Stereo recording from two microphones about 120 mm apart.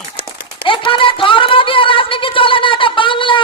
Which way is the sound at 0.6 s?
45° left (ahead or behind).